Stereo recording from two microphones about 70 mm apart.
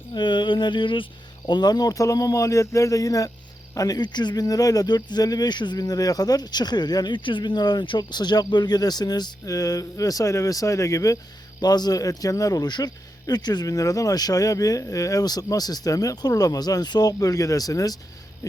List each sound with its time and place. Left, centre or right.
0.1 s a sound: left
1.5 s speech: left
9.5 s speech: left
11.6 s speech: left
12.6 s speech: left